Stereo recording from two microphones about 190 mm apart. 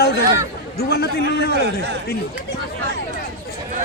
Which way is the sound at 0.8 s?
55° left (ahead or behind).